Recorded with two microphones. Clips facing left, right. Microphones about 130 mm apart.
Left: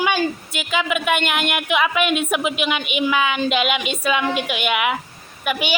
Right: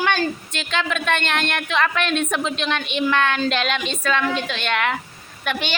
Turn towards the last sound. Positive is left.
turn(degrees=5)  # may be behind; listen again after turning